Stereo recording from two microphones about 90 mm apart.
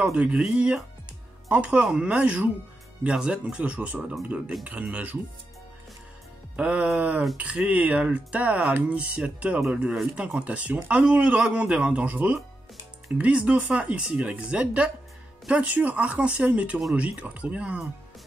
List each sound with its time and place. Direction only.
0.0 s speech: 10° right (ahead or behind)
6.5 s speech: 15° right (ahead or behind)